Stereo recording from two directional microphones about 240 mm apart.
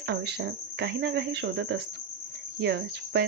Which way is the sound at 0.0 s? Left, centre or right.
Right.